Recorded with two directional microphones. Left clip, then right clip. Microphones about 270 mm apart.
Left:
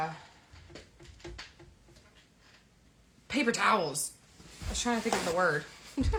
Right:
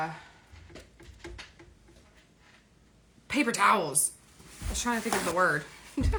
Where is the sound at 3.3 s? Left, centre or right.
Centre.